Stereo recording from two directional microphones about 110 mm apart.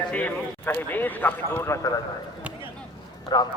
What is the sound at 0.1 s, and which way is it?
A man's voice, 15° left (ahead or behind).